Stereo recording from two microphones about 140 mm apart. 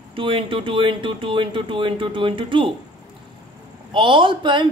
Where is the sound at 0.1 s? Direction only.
40° right (ahead or behind).